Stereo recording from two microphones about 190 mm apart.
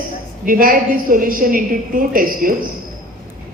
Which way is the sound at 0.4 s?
45° right (ahead or behind).